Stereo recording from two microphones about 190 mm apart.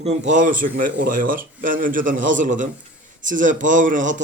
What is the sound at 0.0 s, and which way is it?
A man's voice, 35° right (ahead or behind).